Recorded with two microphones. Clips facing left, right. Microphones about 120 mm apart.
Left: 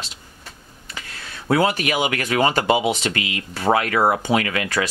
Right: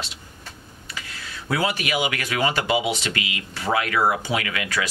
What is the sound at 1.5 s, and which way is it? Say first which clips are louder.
Speech: left 5 dB; 50° left (ahead or behind).